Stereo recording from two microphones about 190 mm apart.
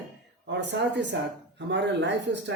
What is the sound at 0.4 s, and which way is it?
A woman's voice, 70° right (ahead or behind).